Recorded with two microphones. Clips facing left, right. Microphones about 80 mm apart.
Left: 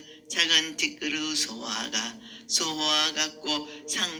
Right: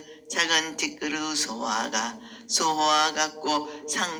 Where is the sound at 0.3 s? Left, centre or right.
Right.